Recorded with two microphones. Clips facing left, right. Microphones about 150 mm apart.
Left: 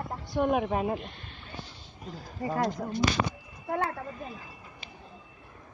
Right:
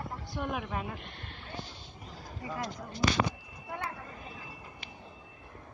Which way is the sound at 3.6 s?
45° left (ahead or behind).